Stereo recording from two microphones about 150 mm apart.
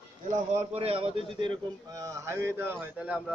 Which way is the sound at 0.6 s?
40° right (ahead or behind).